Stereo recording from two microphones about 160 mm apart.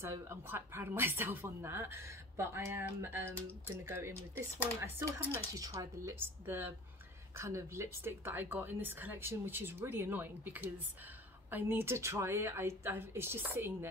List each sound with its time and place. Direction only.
0.0 s speech: 15° right (ahead or behind)